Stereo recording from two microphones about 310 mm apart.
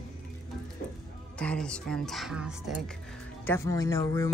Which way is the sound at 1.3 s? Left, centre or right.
Centre.